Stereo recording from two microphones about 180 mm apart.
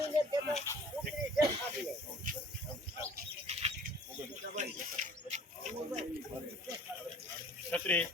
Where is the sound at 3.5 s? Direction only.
35° right (ahead or behind).